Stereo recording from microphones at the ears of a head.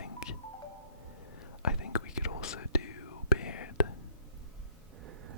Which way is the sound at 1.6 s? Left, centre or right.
Left.